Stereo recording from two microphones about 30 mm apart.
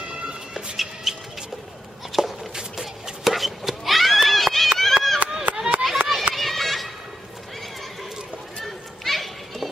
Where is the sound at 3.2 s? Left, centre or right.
Centre.